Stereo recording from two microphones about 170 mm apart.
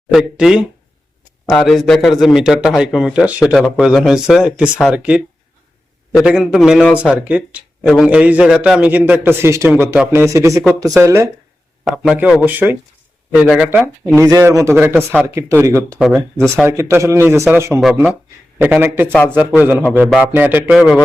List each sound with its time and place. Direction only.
0.1 s a man's voice: centre (ahead or behind); by 11.3 s 15° right (ahead or behind)
11.9 s a man's voice: 5° right (ahead or behind)
16.0 s a man's voice: centre (ahead or behind)
16.6 s a man's voice: 15° right (ahead or behind)